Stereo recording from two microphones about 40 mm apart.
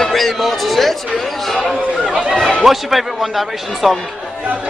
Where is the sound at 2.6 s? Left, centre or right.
Centre.